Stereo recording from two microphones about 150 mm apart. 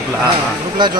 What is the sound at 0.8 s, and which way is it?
Speech, 30° right (ahead or behind).